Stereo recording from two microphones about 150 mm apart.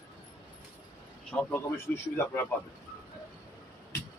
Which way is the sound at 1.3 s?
15° left (ahead or behind).